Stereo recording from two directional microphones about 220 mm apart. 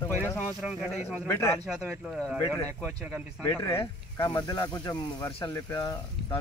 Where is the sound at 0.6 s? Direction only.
5° right (ahead or behind).